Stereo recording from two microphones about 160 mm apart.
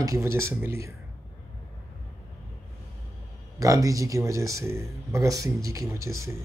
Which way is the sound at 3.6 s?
20° right (ahead or behind).